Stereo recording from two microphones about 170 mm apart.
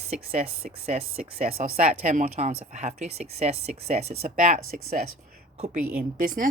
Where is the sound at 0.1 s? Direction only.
45° right (ahead or behind).